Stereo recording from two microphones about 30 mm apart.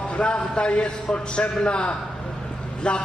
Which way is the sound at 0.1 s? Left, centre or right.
Left.